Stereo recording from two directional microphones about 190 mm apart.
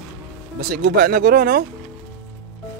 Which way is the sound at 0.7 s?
50° right (ahead or behind).